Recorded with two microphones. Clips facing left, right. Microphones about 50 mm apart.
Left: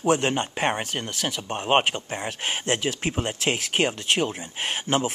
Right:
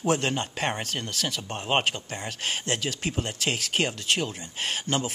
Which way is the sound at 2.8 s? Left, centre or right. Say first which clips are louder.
Left 4 dB; left.